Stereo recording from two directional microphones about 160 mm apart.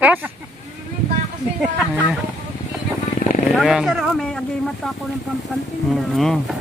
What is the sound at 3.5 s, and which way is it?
Speech, centre (ahead or behind).